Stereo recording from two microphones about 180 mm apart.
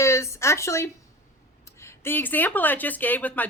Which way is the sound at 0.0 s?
15° left (ahead or behind).